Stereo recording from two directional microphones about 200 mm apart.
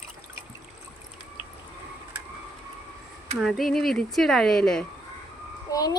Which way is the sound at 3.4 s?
Centre (ahead or behind).